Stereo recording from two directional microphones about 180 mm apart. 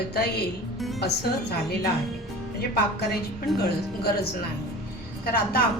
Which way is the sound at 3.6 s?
60° left (ahead or behind).